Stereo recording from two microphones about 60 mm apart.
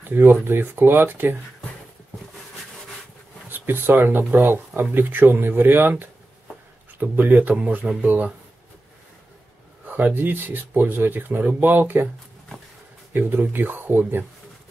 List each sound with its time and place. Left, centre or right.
0.0 s speech: right
3.4 s speech: right
9.8 s speech: right
13.1 s speech: right